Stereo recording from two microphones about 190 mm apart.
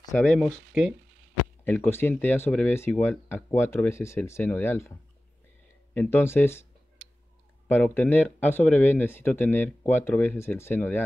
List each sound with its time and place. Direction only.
0.1 s speech: 5° left (ahead or behind)
1.6 s speech: 10° left (ahead or behind)
5.9 s speech: 10° left (ahead or behind)